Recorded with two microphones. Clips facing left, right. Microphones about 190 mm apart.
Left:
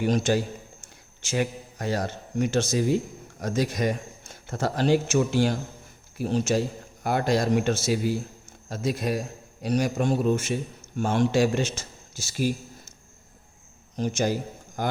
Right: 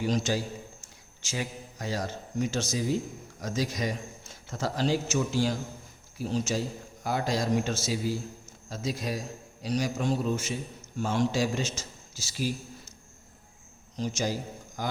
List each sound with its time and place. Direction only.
0.0 s a man's voice: 60° left (ahead or behind)
13.9 s a man's voice: 55° left (ahead or behind)